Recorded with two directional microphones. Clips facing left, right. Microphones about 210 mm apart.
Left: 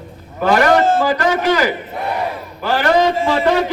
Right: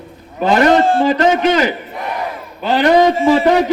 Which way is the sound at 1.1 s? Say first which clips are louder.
Right 3 dB; 20° right (ahead or behind).